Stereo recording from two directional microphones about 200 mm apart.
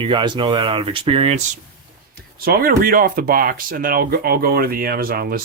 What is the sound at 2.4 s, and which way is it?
Speech, 50° right (ahead or behind).